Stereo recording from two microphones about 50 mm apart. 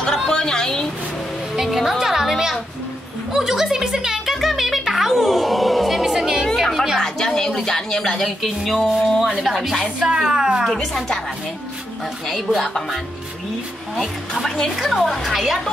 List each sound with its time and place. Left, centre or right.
0.3 s a sound: centre
1.6 s music: centre
3.3 s a woman's voice: centre
4.3 s music: centre
6.4 s music: centre
7.0 s a sound: centre
9.4 s a woman's voice: centre
9.9 s a woman's voice: centre
10.7 s a woman's voice: centre
12.4 s a woman's voice: centre
14.8 s a woman's voice: centre